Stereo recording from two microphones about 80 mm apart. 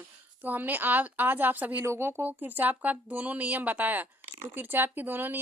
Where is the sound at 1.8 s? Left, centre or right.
Right.